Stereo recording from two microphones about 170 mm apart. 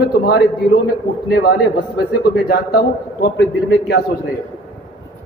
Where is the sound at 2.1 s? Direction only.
65° left (ahead or behind).